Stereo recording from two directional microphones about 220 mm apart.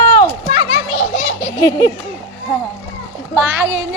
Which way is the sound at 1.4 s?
15° left (ahead or behind).